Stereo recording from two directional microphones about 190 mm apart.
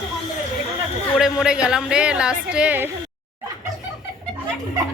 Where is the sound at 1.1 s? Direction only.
5° right (ahead or behind).